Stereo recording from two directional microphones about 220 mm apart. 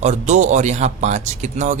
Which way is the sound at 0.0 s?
30° right (ahead or behind).